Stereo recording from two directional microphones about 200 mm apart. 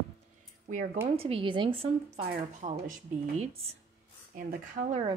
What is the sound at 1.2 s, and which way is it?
Speech, 25° right (ahead or behind).